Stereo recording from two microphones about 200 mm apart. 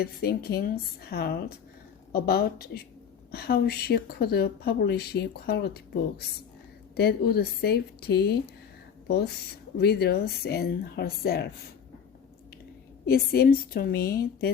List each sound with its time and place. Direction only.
0.0 s speech: 50° left (ahead or behind)
13.1 s speech: 50° left (ahead or behind)